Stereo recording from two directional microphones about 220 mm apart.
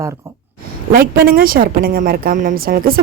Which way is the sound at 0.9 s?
40° right (ahead or behind).